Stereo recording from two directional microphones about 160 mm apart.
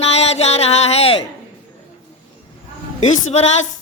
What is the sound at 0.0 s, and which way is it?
Music, 40° left (ahead or behind).